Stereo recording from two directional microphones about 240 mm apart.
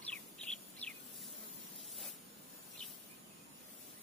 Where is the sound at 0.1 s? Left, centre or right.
Centre.